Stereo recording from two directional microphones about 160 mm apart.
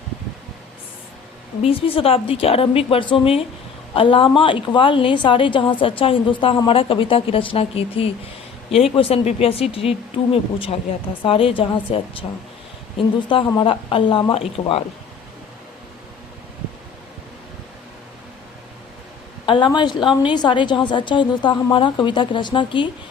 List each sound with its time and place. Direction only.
1.6 s a woman's voice: 35° left (ahead or behind)
13.2 s a woman's voice: 30° left (ahead or behind)
19.5 s a woman's voice: 30° left (ahead or behind)